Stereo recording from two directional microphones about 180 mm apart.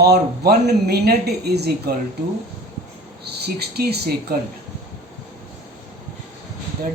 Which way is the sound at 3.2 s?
65° right (ahead or behind).